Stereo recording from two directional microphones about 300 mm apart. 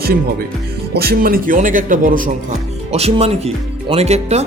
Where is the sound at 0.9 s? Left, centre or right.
Right.